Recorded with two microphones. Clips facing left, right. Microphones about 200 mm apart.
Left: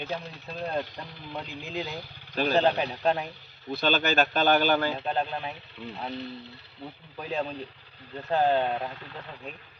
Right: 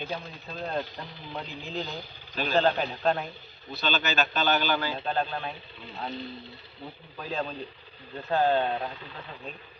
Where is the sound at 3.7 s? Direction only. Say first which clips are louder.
Left 4 dB; 55° left (ahead or behind).